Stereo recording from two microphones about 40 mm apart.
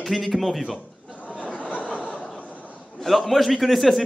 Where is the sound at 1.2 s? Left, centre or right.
Left.